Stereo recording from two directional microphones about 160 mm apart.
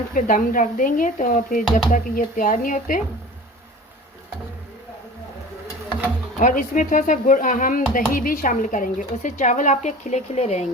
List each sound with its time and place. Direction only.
0.1 s speech: 55° left (ahead or behind)
6.4 s speech: 55° left (ahead or behind)